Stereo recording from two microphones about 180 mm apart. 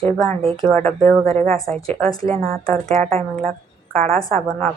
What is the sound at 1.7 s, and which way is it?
Speech, 35° right (ahead or behind).